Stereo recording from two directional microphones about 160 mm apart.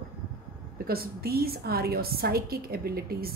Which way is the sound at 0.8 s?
75° right (ahead or behind).